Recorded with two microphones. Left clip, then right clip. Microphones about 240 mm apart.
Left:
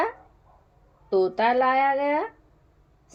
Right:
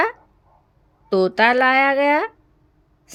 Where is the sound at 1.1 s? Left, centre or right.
Right.